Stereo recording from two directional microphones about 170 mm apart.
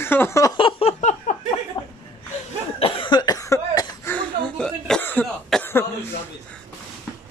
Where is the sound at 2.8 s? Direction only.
30° left (ahead or behind).